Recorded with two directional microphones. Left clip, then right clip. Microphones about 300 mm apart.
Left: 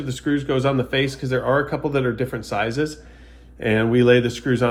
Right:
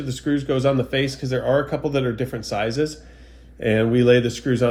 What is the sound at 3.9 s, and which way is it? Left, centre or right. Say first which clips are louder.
Speech: left 2 dB; centre.